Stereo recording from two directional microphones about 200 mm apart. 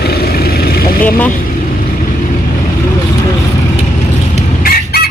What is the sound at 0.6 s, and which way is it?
Vehicle, 45° left (ahead or behind).